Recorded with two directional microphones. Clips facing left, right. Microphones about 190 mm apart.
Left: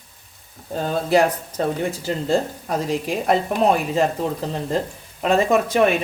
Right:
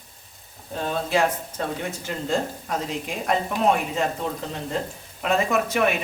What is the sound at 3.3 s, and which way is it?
Speech, 35° left (ahead or behind).